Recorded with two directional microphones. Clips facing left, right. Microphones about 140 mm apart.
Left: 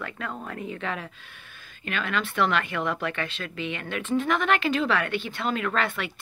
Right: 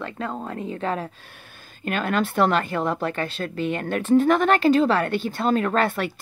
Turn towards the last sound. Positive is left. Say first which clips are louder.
# right 5 dB
turn(degrees=-40)  # may be behind; listen again after turning